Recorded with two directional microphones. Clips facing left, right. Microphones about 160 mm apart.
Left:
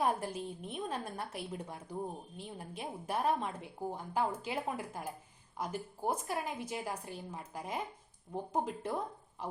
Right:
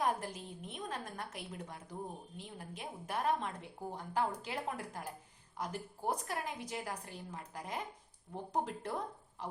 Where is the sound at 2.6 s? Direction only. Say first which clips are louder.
Left 3 dB; 30° left (ahead or behind).